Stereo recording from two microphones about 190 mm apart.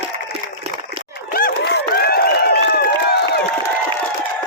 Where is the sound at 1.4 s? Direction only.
55° left (ahead or behind).